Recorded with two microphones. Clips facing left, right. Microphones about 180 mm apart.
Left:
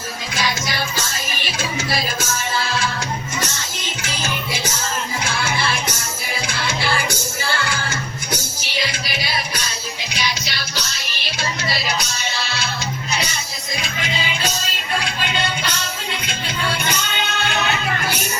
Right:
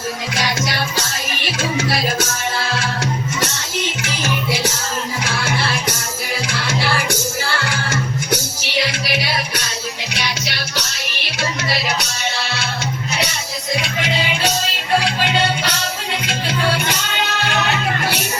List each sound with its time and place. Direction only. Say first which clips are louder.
0.3 s music: even; 75° right (ahead or behind)
6.5 s music: right 1 dB; 70° right (ahead or behind)
8.7 s music: right 5 dB; 70° right (ahead or behind)
13.7 s music: right 4 dB; 75° right (ahead or behind)